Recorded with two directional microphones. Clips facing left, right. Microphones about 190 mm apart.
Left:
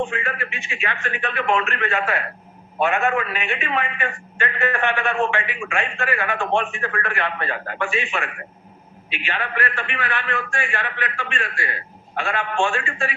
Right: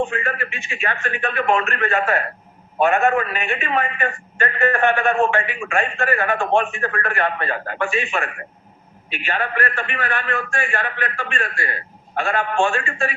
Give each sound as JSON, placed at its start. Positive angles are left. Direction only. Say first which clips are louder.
{"t": 0.1, "sound": "a man's voice", "louder": "right 2 dB", "side_deg": -45}